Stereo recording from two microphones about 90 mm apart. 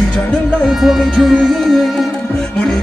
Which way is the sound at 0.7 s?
5° right (ahead or behind).